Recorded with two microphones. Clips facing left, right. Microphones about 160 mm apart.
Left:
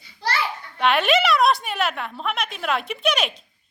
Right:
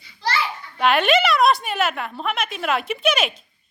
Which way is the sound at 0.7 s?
Centre (ahead or behind).